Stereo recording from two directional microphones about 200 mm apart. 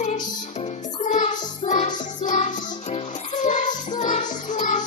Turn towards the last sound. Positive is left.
turn(degrees=40)  # may be behind; listen again after turning